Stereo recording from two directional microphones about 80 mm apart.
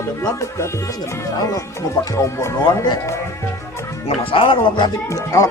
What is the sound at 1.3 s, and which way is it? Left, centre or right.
Speech, left.